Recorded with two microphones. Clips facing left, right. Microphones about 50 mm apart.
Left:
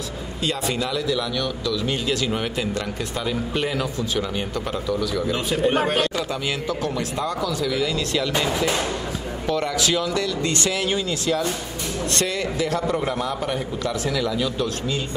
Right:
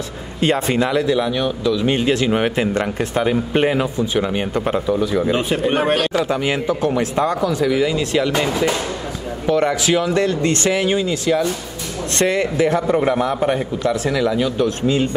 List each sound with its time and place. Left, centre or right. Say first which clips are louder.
0.4 s speech: right 8 dB; right
9.5 s speech: right 6 dB; right